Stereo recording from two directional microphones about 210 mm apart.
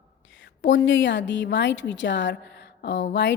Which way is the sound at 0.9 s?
60° left (ahead or behind).